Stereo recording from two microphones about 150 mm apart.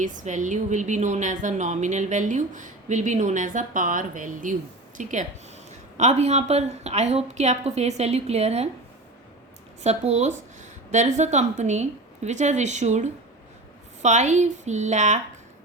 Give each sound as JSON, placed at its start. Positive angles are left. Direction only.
{"t": 0.0, "sound": "a woman's voice", "side_deg": -55}
{"t": 9.8, "sound": "speech", "side_deg": -50}